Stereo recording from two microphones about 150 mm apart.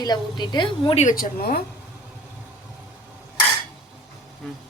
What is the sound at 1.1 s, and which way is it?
Speech, 80° left.